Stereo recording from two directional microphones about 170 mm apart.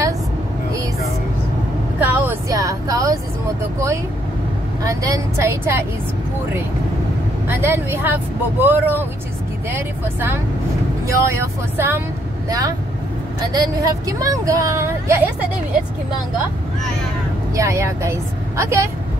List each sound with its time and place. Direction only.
2.0 s vehicle: 10° right (ahead or behind)
4.8 s speech: 20° right (ahead or behind)
7.4 s speech: 15° right (ahead or behind)
17.6 s speech: 15° right (ahead or behind)